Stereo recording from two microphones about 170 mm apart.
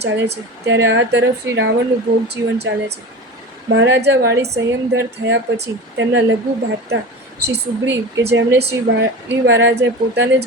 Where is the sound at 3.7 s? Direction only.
90° right.